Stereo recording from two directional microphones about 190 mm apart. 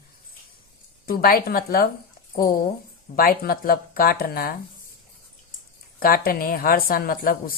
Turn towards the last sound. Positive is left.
turn(degrees=50)  # may be behind; listen again after turning